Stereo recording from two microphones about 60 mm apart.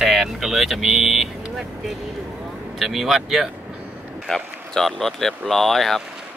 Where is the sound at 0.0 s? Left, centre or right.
Centre.